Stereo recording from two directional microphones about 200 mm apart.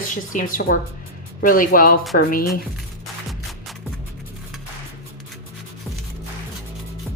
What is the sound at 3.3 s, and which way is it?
Music, centre (ahead or behind).